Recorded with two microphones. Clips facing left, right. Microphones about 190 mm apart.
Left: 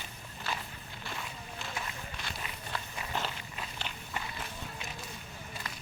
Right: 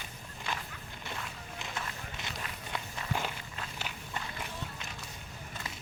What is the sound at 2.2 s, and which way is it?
Run, 20° right (ahead or behind).